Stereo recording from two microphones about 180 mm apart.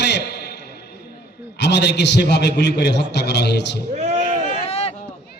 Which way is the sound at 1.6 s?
70° left (ahead or behind).